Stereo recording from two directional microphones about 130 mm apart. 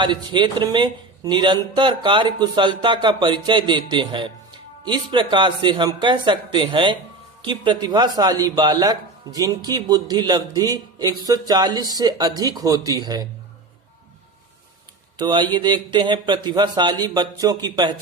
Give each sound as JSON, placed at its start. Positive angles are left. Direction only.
{"t": 0.0, "sound": "a man's voice", "side_deg": -35}
{"t": 15.2, "sound": "a man's voice", "side_deg": -35}